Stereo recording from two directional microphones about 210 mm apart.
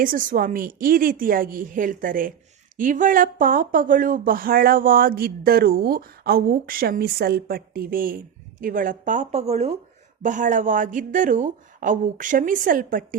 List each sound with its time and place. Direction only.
0.0 s a woman's voice: 40° right (ahead or behind)